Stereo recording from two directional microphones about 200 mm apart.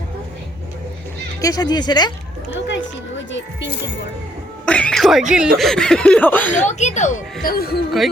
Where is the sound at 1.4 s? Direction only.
20° left (ahead or behind).